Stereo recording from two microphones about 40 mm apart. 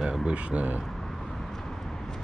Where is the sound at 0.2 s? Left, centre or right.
Right.